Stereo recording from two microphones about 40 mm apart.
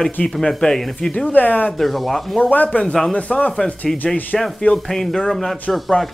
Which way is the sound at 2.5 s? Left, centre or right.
Left.